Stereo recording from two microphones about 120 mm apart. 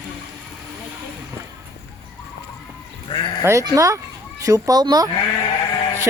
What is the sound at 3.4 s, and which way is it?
Speech, 25° right (ahead or behind).